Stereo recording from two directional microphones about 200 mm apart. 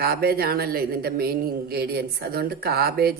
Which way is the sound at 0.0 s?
50° right (ahead or behind).